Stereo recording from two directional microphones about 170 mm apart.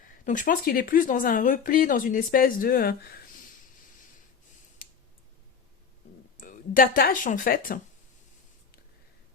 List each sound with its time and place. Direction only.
0.3 s speech: 55° left (ahead or behind)
6.4 s speech: 55° left (ahead or behind)